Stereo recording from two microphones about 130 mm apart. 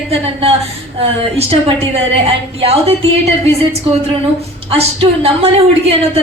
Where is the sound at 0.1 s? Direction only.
50° right (ahead or behind).